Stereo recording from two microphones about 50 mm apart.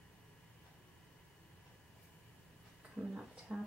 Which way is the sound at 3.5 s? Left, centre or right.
Right.